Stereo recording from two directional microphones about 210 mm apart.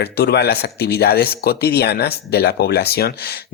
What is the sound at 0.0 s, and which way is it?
Speech, 50° left (ahead or behind).